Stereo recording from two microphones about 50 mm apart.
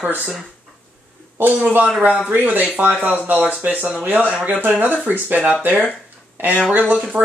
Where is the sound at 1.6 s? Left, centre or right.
Right.